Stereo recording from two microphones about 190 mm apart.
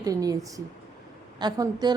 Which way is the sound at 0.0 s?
20° right (ahead or behind).